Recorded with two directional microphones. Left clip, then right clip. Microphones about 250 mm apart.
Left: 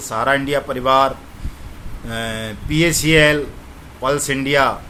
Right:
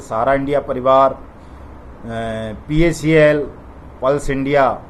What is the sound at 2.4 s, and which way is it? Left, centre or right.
Speech, centre.